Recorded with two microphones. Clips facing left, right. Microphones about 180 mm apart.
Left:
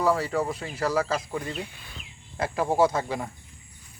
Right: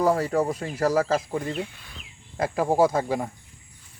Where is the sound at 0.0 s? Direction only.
45° right (ahead or behind).